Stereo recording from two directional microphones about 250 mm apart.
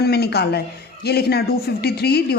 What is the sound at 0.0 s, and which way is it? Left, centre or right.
Speech, left.